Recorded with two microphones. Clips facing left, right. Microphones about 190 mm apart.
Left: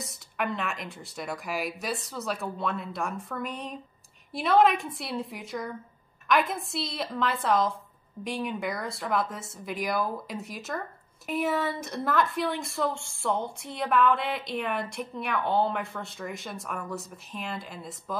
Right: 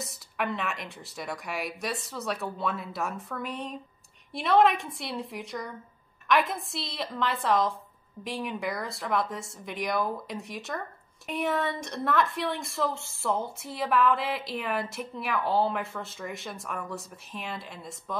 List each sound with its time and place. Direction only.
0.0 s speech: centre (ahead or behind)